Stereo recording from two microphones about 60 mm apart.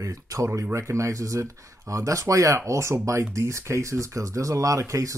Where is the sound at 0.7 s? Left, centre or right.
Right.